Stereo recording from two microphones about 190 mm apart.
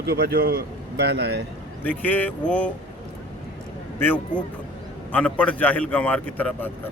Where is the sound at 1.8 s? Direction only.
10° left (ahead or behind).